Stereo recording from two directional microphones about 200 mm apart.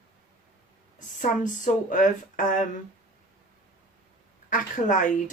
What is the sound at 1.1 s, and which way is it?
Speech, 40° left (ahead or behind).